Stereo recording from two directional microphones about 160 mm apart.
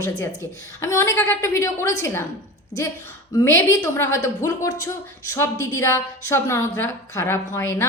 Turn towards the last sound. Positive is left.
turn(degrees=15)  # may be behind; listen again after turning